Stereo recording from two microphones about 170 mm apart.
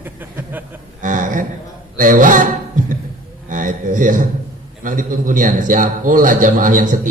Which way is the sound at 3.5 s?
50° right (ahead or behind).